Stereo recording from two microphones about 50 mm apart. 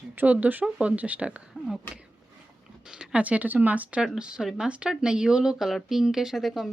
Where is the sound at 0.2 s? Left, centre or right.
Right.